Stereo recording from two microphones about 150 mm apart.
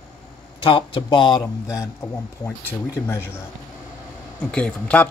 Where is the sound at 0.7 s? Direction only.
35° left (ahead or behind).